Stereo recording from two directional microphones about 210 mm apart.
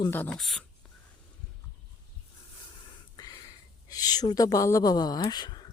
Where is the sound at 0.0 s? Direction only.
10° left (ahead or behind).